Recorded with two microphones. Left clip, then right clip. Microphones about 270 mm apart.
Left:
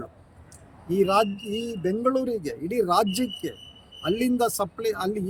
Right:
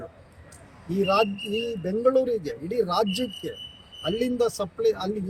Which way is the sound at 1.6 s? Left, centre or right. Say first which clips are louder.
Even; centre.